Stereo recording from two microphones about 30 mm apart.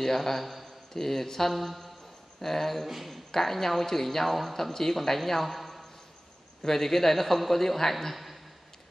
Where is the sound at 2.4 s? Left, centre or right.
Centre.